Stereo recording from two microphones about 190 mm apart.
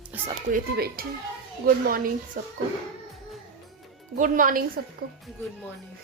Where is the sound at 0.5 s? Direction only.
55° right (ahead or behind).